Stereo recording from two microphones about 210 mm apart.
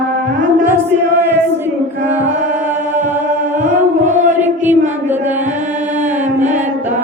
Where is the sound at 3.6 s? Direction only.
35° right (ahead or behind).